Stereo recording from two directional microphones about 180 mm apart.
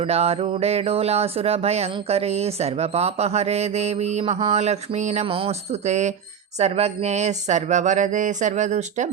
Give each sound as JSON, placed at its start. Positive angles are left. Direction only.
{"t": 0.0, "sound": "speech", "side_deg": -35}